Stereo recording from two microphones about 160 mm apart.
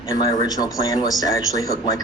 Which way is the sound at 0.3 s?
25° left (ahead or behind).